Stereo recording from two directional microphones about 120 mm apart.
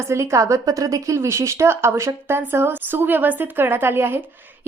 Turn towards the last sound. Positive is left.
turn(degrees=-20)  # may be behind; listen again after turning